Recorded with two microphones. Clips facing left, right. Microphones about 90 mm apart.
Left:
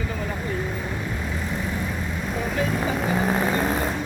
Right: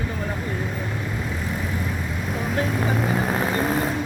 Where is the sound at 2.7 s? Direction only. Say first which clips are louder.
Right 1 dB; centre (ahead or behind).